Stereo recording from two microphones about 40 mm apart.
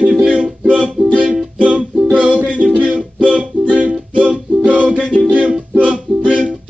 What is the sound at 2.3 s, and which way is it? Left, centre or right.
Music, right.